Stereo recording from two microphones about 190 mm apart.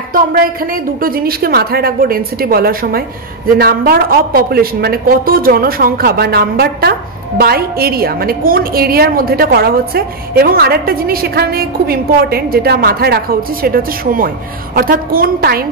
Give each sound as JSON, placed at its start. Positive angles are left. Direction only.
{"t": 0.1, "sound": "speech", "side_deg": -50}